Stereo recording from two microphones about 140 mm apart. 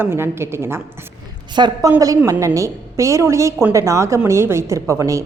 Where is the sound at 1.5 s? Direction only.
30° right (ahead or behind).